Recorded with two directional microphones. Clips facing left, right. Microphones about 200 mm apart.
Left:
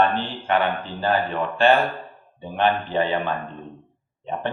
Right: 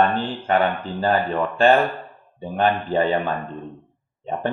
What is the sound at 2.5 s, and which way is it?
Speech, 40° right (ahead or behind).